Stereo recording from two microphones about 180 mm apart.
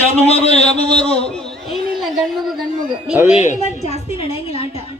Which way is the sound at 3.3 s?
40° left (ahead or behind).